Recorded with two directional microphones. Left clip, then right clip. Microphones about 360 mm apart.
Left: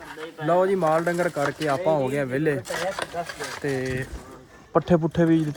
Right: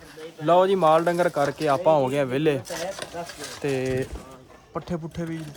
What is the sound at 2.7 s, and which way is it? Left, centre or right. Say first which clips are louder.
Speech: left 4 dB; centre.